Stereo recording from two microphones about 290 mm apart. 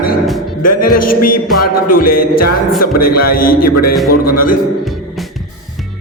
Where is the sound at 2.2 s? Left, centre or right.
Left.